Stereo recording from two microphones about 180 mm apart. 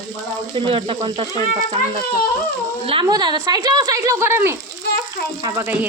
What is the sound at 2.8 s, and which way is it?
Speech, 25° right (ahead or behind).